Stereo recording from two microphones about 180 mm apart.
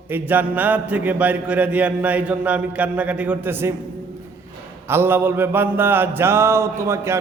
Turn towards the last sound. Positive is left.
turn(degrees=-15)  # may be behind; listen again after turning